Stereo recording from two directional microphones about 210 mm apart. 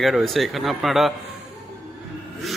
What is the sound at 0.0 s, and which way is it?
Speech, centre (ahead or behind).